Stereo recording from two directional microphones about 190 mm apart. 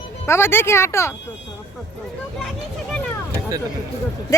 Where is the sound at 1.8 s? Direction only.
Centre (ahead or behind).